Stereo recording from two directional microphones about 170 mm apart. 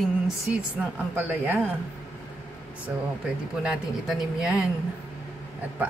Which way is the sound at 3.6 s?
Centre (ahead or behind).